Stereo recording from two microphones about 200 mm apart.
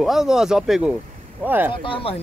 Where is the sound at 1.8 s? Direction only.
25° left (ahead or behind).